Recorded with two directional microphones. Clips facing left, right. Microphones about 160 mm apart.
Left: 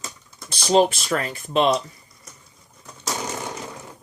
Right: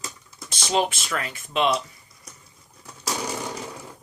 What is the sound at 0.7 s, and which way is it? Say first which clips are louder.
Speech: left 6 dB; 35° left (ahead or behind).